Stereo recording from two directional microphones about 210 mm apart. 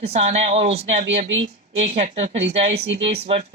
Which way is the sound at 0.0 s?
30° right (ahead or behind).